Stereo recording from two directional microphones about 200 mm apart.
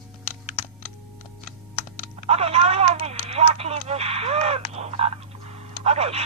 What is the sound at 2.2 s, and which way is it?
Speech, 30° right (ahead or behind).